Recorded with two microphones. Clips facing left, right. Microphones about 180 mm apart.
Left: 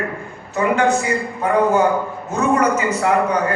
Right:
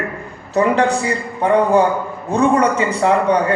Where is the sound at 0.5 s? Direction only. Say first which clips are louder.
Right 2 dB; 35° right (ahead or behind).